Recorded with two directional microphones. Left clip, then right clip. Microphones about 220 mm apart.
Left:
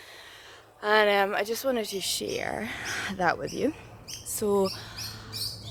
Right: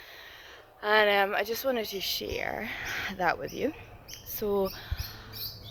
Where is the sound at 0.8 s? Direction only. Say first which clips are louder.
Left 1 dB; 30° left (ahead or behind).